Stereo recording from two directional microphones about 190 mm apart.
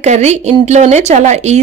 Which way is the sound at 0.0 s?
35° right (ahead or behind).